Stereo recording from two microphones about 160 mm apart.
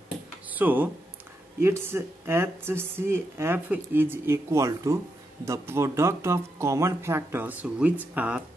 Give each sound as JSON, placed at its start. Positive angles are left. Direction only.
{"t": 0.5, "sound": "speech", "side_deg": -10}